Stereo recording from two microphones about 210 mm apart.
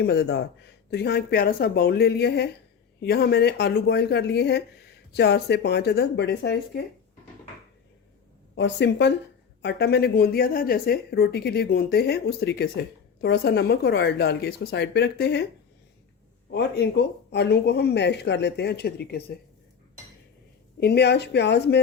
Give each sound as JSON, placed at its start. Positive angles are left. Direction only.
{"t": 0.0, "sound": "speech", "side_deg": 55}
{"t": 8.5, "sound": "speech", "side_deg": 55}
{"t": 16.5, "sound": "speech", "side_deg": 50}
{"t": 20.8, "sound": "speech", "side_deg": 50}